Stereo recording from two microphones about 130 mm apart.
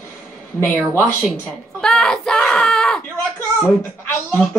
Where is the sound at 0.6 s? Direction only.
20° left (ahead or behind).